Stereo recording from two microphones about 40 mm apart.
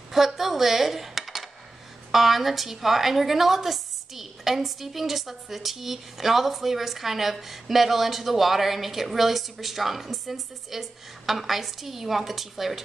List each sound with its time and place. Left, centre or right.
0.1 s dishes: centre
2.1 s a woman's voice: centre